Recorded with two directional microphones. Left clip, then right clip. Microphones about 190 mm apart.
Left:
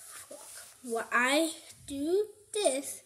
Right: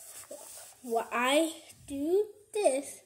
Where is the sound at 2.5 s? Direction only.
5° left (ahead or behind).